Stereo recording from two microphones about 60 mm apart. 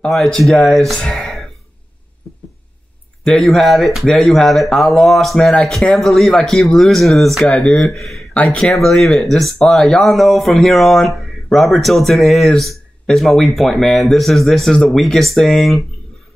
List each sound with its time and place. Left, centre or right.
0.1 s speech: centre
3.3 s speech: centre